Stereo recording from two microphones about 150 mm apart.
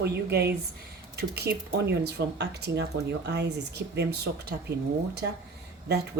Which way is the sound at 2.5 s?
90° right.